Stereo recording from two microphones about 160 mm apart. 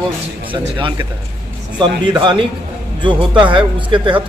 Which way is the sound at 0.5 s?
30° right (ahead or behind).